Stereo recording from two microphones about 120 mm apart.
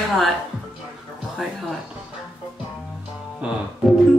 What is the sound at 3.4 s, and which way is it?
Speech, 10° right (ahead or behind).